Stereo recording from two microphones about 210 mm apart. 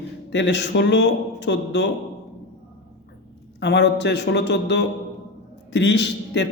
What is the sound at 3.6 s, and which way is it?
A man's voice, 55° left (ahead or behind).